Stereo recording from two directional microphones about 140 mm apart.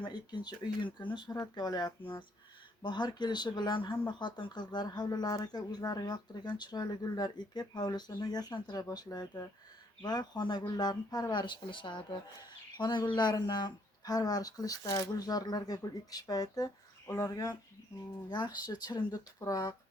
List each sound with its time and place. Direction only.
0.0 s speech: 35° left (ahead or behind)